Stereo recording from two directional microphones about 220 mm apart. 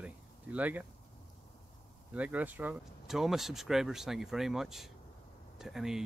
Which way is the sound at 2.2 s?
5° right (ahead or behind).